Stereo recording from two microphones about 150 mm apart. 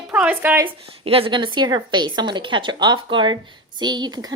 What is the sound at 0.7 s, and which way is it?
A woman's voice, 40° right (ahead or behind).